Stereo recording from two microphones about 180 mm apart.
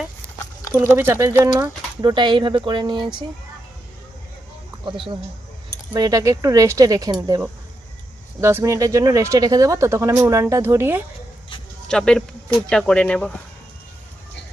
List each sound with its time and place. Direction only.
0.7 s speech: 10° right (ahead or behind)
2.0 s speech: 25° right (ahead or behind)
5.9 s speech: 20° right (ahead or behind)
11.9 s speech: 5° left (ahead or behind)